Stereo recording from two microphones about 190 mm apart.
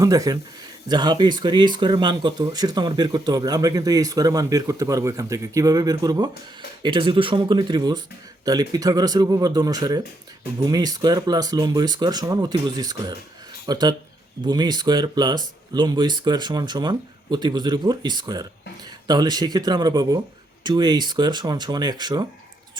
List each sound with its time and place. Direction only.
0.0 s speech: 20° right (ahead or behind)